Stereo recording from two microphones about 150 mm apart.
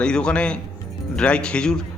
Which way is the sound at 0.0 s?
5° left (ahead or behind).